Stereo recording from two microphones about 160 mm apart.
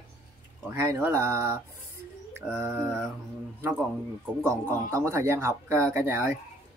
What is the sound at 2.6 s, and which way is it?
Speech, 20° right (ahead or behind).